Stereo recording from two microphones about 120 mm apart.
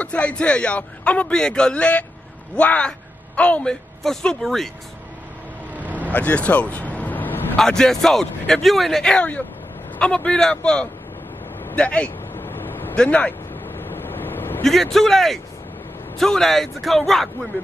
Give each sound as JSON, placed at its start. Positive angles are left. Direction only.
{"t": 0.0, "sound": "a man's voice", "side_deg": 10}
{"t": 5.8, "sound": "vehicle", "side_deg": -15}
{"t": 6.0, "sound": "vehicle", "side_deg": 15}
{"t": 7.6, "sound": "a man's voice", "side_deg": 5}
{"t": 11.6, "sound": "vehicle", "side_deg": 10}
{"t": 14.6, "sound": "speech", "side_deg": 0}